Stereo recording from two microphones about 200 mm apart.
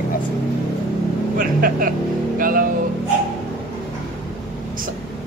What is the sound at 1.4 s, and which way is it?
Speech, 45° right (ahead or behind).